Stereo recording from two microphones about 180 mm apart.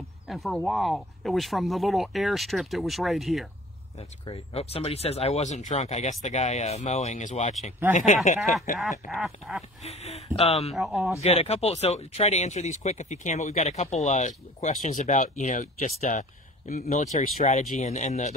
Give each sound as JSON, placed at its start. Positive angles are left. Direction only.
{"t": 0.3, "sound": "speech", "side_deg": 0}
{"t": 4.3, "sound": "speech", "side_deg": 35}
{"t": 9.1, "sound": "speech", "side_deg": 0}
{"t": 9.8, "sound": "speech", "side_deg": 35}
{"t": 10.7, "sound": "speech", "side_deg": 0}
{"t": 11.2, "sound": "speech", "side_deg": 35}